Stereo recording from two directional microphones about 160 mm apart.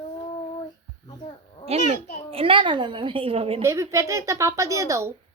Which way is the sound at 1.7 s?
45° right (ahead or behind).